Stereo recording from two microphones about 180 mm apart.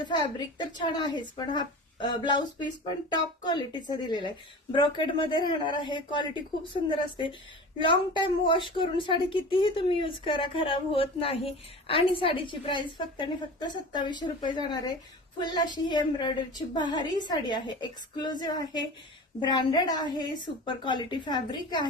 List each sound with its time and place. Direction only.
0.0 s speech: 25° left (ahead or behind)